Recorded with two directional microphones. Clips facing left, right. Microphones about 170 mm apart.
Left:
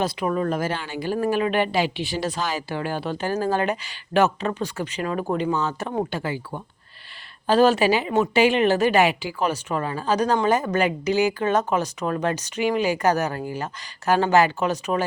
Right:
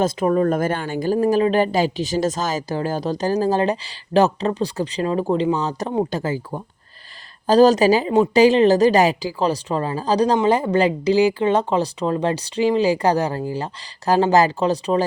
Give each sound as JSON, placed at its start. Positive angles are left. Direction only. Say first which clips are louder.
{"t": 0.0, "sound": "speech", "louder": "right 6 dB", "side_deg": -40}